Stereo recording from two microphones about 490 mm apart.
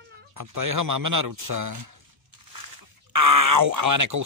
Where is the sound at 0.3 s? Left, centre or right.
Right.